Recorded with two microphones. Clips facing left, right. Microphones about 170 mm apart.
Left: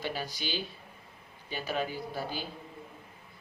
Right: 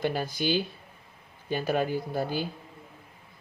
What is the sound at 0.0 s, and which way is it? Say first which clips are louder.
Speech: right 8 dB; 50° right (ahead or behind).